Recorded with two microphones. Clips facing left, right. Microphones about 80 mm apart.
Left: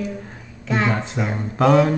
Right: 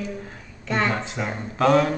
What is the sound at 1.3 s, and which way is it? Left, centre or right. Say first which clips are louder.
Child singing: left 3 dB; centre.